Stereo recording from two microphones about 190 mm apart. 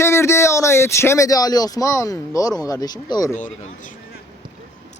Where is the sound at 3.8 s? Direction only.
45° left (ahead or behind).